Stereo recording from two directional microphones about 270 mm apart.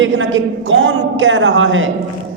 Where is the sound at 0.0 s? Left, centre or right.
Right.